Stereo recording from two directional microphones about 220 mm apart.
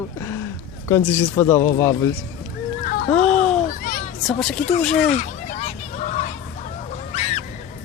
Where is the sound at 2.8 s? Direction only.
40° left (ahead or behind).